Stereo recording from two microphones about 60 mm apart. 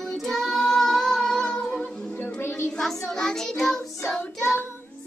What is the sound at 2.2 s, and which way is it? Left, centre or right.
Music, left.